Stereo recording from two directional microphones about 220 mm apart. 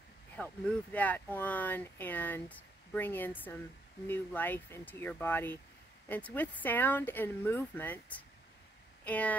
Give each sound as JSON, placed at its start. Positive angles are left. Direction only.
{"t": 0.4, "sound": "speech", "side_deg": 5}